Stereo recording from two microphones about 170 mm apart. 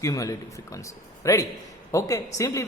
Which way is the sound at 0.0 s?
20° left (ahead or behind).